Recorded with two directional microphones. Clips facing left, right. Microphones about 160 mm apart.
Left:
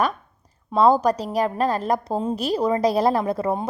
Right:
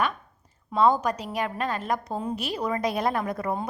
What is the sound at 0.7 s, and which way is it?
A woman's voice, 35° left (ahead or behind).